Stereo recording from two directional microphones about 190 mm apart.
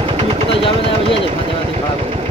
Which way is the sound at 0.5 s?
30° left (ahead or behind).